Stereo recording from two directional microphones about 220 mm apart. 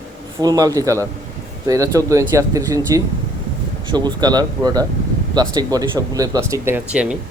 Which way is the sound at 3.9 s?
20° right (ahead or behind).